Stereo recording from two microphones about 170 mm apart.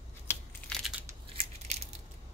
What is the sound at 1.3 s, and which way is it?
Crushing, 35° right (ahead or behind).